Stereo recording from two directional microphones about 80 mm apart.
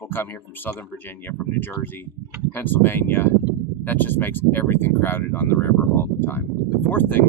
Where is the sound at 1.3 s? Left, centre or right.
Left.